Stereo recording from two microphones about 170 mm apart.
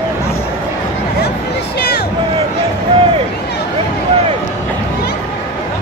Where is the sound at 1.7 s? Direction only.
70° left (ahead or behind).